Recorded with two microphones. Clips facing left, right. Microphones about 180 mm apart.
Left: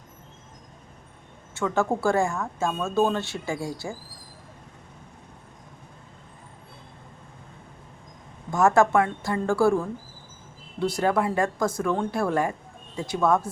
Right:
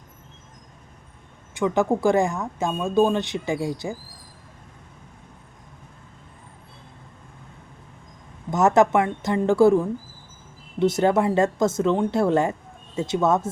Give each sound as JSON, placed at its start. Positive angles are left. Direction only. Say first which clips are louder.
{"t": 1.5, "sound": "speech", "louder": "right 4 dB", "side_deg": -15}
{"t": 8.4, "sound": "speech", "louder": "right 2 dB", "side_deg": -20}